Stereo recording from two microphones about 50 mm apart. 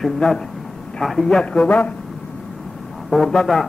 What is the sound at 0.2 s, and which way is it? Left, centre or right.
A man's voice, centre.